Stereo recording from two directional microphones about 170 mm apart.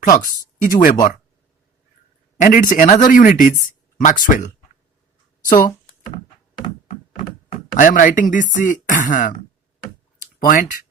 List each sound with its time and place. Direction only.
0.0 s speech: 50° left (ahead or behind)
2.4 s speech: 50° left (ahead or behind)
7.8 s speech: 50° left (ahead or behind)
10.4 s speech: 55° left (ahead or behind)